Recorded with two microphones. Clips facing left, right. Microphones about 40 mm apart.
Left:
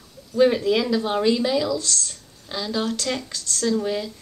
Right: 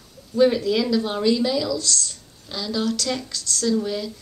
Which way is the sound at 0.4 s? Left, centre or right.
Left.